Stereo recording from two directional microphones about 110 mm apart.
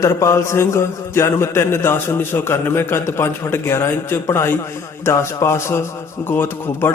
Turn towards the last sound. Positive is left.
turn(degrees=20)  # may be behind; listen again after turning